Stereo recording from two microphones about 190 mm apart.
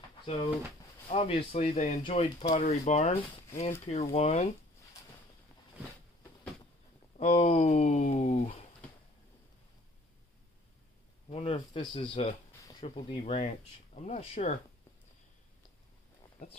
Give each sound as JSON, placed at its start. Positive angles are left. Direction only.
{"t": 1.0, "sound": "speech", "side_deg": 35}
{"t": 7.2, "sound": "speech", "side_deg": 30}
{"t": 11.2, "sound": "speech", "side_deg": 30}